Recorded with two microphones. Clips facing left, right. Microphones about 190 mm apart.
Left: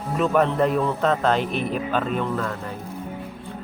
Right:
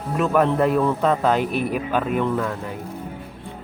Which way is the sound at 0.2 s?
5° right (ahead or behind).